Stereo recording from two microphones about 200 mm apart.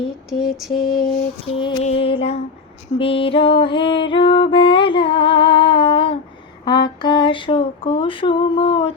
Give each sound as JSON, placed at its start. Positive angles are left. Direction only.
{"t": 0.3, "sound": "mantra", "side_deg": 0}
{"t": 1.5, "sound": "music", "side_deg": 30}